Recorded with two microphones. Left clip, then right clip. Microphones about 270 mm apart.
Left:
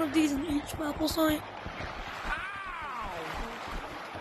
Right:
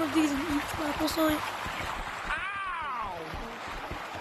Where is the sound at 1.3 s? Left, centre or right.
Centre.